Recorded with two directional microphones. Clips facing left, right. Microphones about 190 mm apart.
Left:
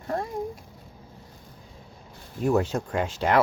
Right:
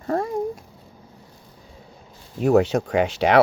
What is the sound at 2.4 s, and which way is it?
Speech, 75° right (ahead or behind).